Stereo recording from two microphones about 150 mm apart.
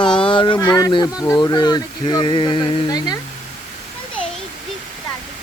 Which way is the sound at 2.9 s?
25° left (ahead or behind).